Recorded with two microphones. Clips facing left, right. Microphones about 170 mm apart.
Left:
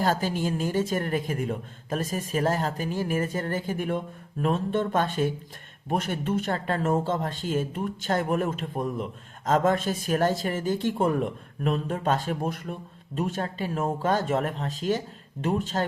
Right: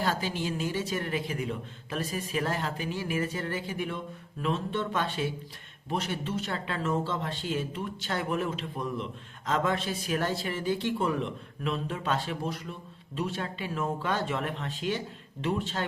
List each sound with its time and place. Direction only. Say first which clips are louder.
0.0 s a woman's voice: left 5 dB; 45° left (ahead or behind)